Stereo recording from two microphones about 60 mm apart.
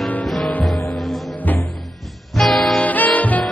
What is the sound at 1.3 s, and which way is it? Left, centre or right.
Music, left.